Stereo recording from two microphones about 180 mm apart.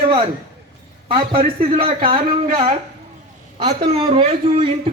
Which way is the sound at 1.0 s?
30° right (ahead or behind).